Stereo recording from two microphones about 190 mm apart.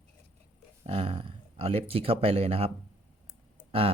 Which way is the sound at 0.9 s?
30° right (ahead or behind).